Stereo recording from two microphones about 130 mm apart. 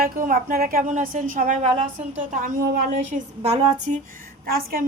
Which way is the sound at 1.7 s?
50° right (ahead or behind).